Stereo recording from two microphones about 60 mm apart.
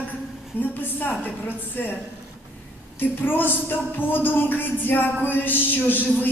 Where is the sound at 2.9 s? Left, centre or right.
Left.